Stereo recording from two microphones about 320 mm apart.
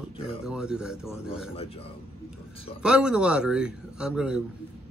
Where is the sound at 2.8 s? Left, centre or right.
Centre.